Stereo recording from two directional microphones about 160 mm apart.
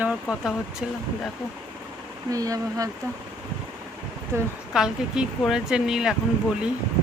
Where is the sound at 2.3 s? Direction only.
20° right (ahead or behind).